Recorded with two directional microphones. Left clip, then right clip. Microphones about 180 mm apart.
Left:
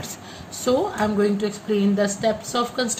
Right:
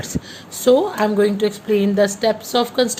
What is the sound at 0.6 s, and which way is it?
A woman's voice, 50° right (ahead or behind).